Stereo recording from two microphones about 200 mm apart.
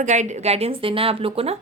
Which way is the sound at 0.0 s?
35° right (ahead or behind).